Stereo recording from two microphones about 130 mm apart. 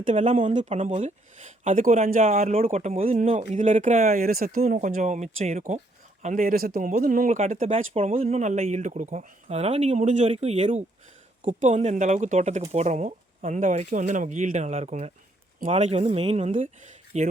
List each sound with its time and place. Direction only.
0.0 s speech: 60° right (ahead or behind)
0.4 s speech: 70° right (ahead or behind)
0.7 s speech: 55° right (ahead or behind); by 2.2 s 75° right (ahead or behind)
2.2 s speech: 55° right (ahead or behind)
3.3 s speech: 75° right (ahead or behind)
6.2 s speech: 85° right; by 17.3 s 60° right (ahead or behind)